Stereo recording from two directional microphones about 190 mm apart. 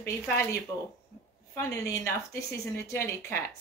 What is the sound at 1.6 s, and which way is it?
Speech, 15° left (ahead or behind).